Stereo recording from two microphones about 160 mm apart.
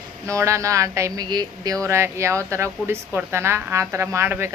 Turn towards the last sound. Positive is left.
turn(degrees=-15)  # may be behind; listen again after turning